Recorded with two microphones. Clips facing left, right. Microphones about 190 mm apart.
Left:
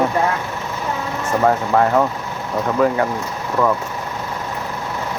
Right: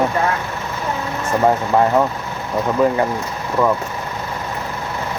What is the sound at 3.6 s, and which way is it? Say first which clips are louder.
Speech: right 1 dB; 5° right (ahead or behind).